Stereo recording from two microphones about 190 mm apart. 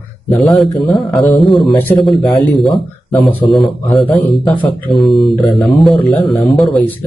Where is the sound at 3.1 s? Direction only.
10° left (ahead or behind).